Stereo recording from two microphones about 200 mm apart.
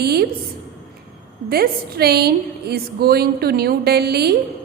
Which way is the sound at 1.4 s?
50° right (ahead or behind).